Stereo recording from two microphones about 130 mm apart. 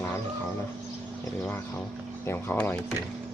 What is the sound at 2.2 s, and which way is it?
Speech, 15° left (ahead or behind).